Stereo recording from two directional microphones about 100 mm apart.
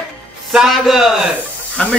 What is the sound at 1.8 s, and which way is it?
Speech, 10° left (ahead or behind).